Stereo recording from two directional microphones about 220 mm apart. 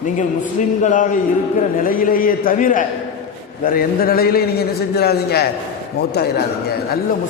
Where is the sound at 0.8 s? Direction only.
35° left (ahead or behind).